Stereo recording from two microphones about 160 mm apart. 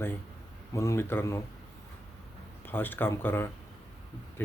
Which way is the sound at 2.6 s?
10° left (ahead or behind).